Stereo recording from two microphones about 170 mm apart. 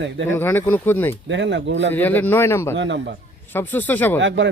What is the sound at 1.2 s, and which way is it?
Speech, 90° right.